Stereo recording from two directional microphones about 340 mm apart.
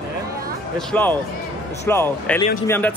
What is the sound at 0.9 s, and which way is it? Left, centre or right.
Speech, centre.